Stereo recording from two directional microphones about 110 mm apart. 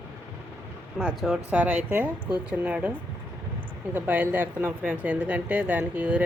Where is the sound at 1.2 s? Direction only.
10° right (ahead or behind).